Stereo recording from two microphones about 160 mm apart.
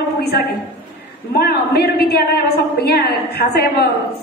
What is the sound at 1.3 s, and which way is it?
A woman's voice, 80° left.